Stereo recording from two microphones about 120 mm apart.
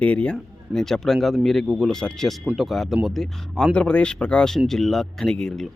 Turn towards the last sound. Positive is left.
turn(degrees=5)  # may be behind; listen again after turning